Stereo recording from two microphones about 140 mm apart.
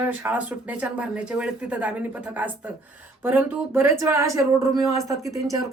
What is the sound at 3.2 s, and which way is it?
Speech, 15° right (ahead or behind).